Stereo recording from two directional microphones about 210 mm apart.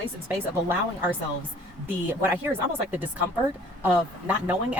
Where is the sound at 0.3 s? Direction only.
10° right (ahead or behind).